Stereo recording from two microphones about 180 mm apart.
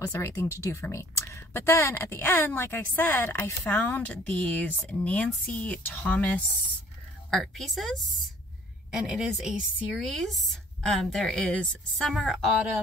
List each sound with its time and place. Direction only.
0.0 s a woman's voice: 15° left (ahead or behind); by 12.8 s centre (ahead or behind)